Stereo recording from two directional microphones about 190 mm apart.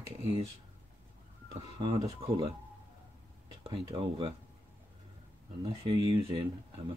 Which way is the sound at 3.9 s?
25° right (ahead or behind).